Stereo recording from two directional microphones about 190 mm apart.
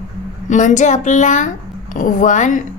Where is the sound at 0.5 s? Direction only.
40° left (ahead or behind).